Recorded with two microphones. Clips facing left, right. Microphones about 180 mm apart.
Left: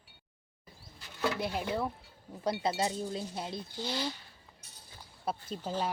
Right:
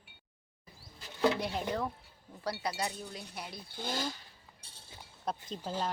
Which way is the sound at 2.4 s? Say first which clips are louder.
Left 5 dB; 20° left (ahead or behind).